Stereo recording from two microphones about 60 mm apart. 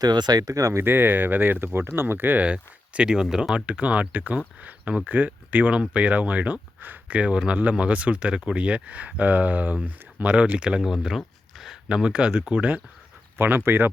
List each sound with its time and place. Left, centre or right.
0.0 s speech: right
0.8 s speech: right
2.4 s speech: centre
3.5 s speech: right
13.3 s speech: right